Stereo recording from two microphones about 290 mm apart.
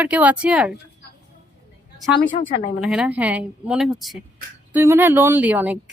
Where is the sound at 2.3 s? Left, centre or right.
Left.